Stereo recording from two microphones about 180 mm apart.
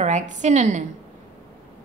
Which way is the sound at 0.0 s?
40° right (ahead or behind).